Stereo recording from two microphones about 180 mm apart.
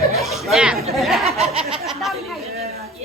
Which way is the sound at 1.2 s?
35° right (ahead or behind).